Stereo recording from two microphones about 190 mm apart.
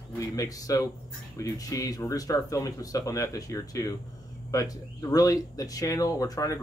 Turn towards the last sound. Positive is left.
turn(degrees=15)  # may be behind; listen again after turning